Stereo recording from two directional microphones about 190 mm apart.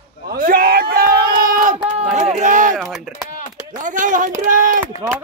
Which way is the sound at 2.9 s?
Centre (ahead or behind).